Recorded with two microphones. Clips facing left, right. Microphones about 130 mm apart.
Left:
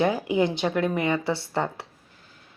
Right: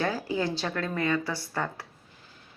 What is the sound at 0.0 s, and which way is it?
A woman's voice, 20° left (ahead or behind).